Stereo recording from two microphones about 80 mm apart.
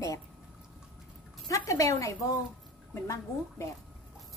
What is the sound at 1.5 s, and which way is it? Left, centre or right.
Speech, left.